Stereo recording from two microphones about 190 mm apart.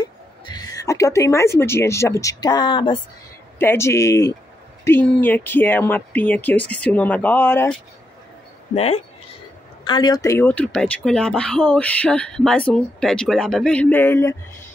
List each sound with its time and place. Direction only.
0.0 s a sound: 20° left (ahead or behind)
1.6 s speech: 15° left (ahead or behind)
3.5 s speech: 15° left (ahead or behind)
8.7 s speech: 35° left (ahead or behind)
9.8 s speech: 20° left (ahead or behind)